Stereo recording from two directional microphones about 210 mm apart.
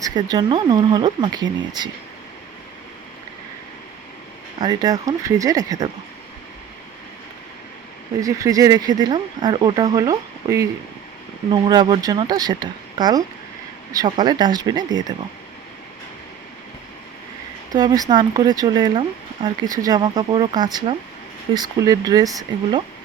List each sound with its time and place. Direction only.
0.0 s speech: 20° right (ahead or behind)
4.6 s speech: 20° right (ahead or behind)
8.2 s speech: 15° right (ahead or behind)
17.7 s speech: 20° right (ahead or behind)